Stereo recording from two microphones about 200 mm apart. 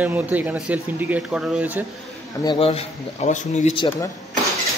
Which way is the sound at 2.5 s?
30° left (ahead or behind).